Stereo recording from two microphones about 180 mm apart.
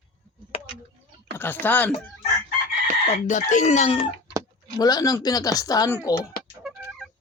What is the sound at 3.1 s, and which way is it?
Speech, 45° left (ahead or behind).